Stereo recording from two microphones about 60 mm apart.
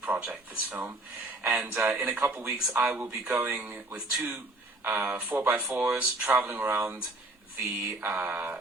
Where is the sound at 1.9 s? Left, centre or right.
Right.